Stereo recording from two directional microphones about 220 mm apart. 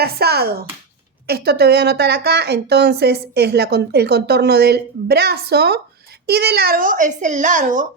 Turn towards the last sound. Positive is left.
turn(degrees=-35)  # may be behind; listen again after turning